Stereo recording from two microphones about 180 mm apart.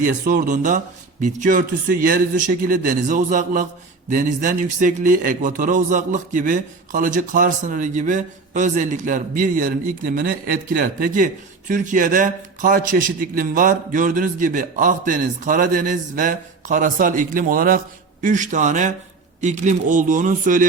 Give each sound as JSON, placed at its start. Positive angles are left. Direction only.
{"t": 0.0, "sound": "a man's voice", "side_deg": -50}